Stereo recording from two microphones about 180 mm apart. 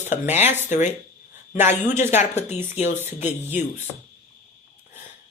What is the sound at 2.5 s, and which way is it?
Speech, 10° right (ahead or behind).